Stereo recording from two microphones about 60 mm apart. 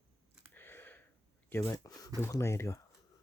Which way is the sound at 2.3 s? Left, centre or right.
Left.